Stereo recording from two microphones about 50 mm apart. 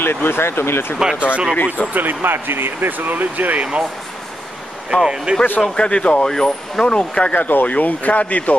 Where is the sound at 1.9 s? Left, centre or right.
Right.